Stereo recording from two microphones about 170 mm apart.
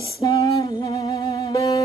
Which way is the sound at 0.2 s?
30° left (ahead or behind).